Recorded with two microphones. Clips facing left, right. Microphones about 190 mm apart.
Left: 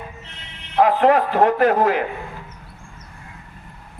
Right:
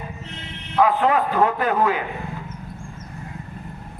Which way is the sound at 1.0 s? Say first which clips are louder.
Left 4 dB; 45° left (ahead or behind).